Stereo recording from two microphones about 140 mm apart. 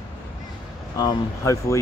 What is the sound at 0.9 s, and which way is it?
Speech, 25° left (ahead or behind).